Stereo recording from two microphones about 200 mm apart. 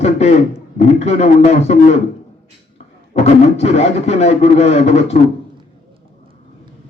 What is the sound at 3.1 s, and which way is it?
Speech, 35° left (ahead or behind).